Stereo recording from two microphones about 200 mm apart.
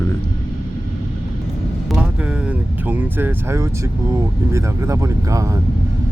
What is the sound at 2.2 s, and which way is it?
Vehicle, 5° right (ahead or behind).